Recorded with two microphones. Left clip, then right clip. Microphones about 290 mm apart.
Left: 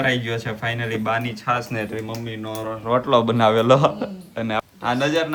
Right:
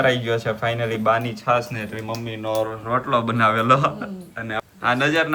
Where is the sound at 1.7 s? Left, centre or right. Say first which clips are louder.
Left 2 dB; centre.